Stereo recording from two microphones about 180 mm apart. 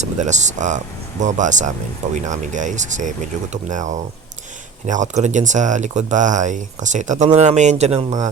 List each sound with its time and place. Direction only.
0.0 s speech: 40° right (ahead or behind)